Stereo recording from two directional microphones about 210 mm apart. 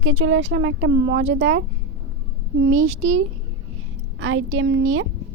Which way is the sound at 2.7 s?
70° right (ahead or behind).